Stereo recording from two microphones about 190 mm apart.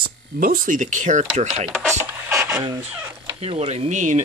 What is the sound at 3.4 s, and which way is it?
Speech, 30° right (ahead or behind).